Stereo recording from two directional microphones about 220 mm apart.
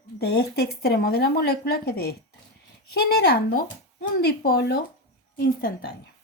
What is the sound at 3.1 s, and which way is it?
A woman's voice, 45° left (ahead or behind).